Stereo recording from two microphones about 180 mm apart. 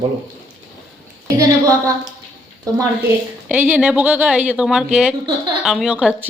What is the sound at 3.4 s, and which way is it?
Speech, 5° right (ahead or behind).